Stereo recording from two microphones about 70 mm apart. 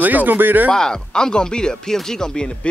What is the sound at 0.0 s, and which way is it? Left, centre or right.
Speech, right.